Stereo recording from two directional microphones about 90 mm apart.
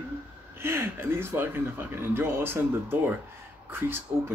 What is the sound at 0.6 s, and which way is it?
Speech, 25° right (ahead or behind).